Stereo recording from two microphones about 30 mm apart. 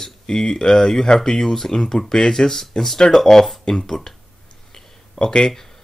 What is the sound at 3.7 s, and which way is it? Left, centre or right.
Speech, left.